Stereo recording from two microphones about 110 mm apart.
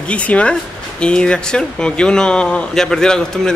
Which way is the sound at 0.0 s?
10° left (ahead or behind).